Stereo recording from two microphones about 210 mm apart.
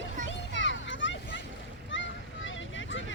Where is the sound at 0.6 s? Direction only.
60° left (ahead or behind).